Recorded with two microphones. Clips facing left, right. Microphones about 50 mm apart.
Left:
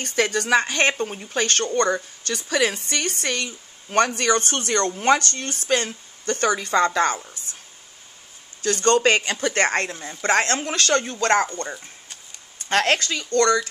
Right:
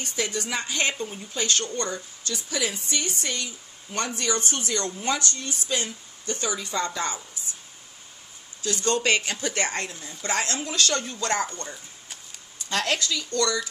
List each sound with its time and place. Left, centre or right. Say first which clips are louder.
0.0 s speech: left 7 dB; left
8.6 s speech: left 6 dB; left